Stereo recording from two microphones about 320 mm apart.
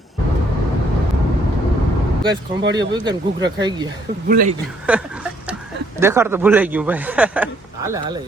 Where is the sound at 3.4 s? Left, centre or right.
Right.